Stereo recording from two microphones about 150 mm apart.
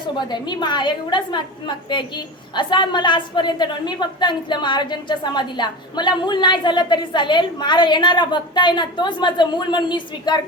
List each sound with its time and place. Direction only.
0.2 s a woman's voice: 30° left (ahead or behind)